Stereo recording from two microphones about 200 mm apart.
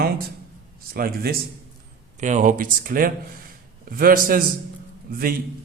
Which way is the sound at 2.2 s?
35° right (ahead or behind).